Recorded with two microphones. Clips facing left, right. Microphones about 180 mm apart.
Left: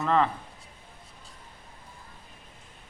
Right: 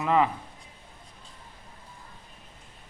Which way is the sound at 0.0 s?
10° right (ahead or behind).